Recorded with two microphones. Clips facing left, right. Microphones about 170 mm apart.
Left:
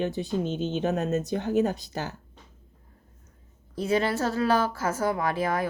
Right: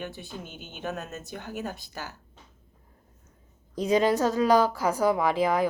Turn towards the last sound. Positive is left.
turn(degrees=-15)  # may be behind; listen again after turning